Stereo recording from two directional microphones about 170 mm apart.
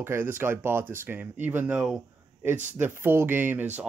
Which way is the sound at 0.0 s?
15° right (ahead or behind).